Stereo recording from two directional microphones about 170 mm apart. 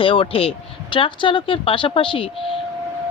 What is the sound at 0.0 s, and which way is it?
Speech, 30° left (ahead or behind).